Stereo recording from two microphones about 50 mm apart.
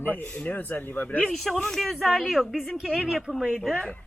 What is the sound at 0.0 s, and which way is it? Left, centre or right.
Speech, left.